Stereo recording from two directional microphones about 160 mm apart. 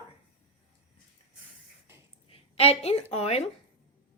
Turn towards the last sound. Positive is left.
turn(degrees=40)  # may be behind; listen again after turning